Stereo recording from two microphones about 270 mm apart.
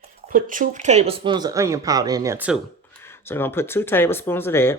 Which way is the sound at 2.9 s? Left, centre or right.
Centre.